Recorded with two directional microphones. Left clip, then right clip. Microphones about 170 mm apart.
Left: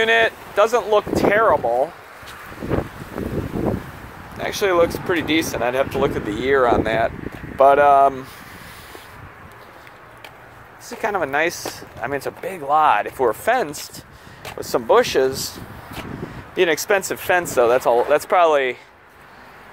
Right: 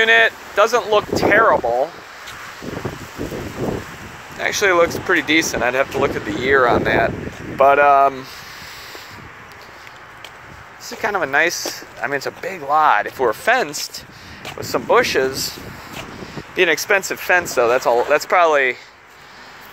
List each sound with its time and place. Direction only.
0.0 s speech: 25° left (ahead or behind)
4.4 s speech: 5° left (ahead or behind)
7.5 s speech: 25° left (ahead or behind)
10.9 s speech: 20° left (ahead or behind)
14.6 s speech: 35° left (ahead or behind)
16.5 s speech: 25° left (ahead or behind)
17.6 s speech: 20° left (ahead or behind)